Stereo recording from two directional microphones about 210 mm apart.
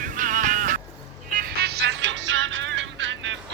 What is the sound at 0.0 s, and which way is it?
Music, 40° right (ahead or behind).